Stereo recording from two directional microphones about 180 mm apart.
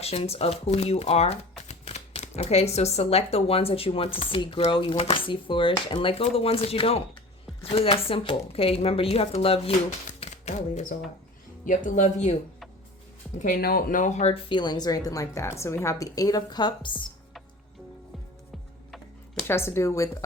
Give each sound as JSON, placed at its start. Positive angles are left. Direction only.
{"t": 0.0, "sound": "speech", "side_deg": 35}
{"t": 10.2, "sound": "typewriter", "side_deg": 40}
{"t": 11.6, "sound": "speech", "side_deg": 45}
{"t": 13.4, "sound": "speech", "side_deg": 50}
{"t": 14.5, "sound": "a woman's voice", "side_deg": 25}
{"t": 19.5, "sound": "speech", "side_deg": 15}